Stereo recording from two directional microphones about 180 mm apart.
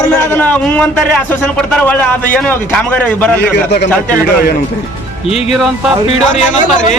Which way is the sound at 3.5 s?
70° left (ahead or behind).